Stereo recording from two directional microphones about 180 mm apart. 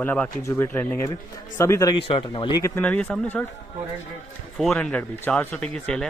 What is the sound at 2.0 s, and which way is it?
Speech, 30° left (ahead or behind).